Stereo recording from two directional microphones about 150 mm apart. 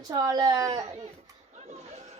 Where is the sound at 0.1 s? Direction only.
25° right (ahead or behind).